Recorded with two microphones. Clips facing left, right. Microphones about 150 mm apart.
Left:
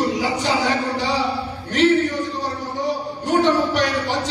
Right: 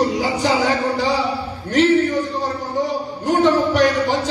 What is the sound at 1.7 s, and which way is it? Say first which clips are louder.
Speech: right 2 dB; 45° right (ahead or behind).